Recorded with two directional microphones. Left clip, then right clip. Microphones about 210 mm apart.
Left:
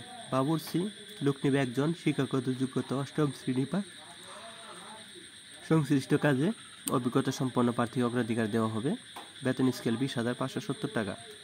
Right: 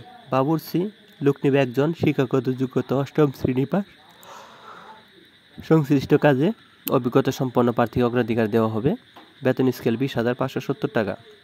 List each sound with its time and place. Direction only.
0.3 s speech: 30° right (ahead or behind)
5.6 s speech: 35° right (ahead or behind)